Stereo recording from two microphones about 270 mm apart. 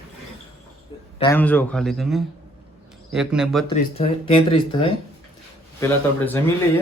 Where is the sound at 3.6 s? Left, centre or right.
Left.